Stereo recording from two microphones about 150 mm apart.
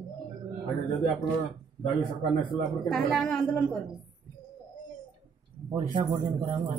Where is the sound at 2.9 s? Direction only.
Centre (ahead or behind).